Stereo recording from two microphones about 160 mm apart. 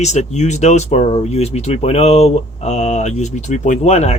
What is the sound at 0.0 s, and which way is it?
Speech, 45° left (ahead or behind).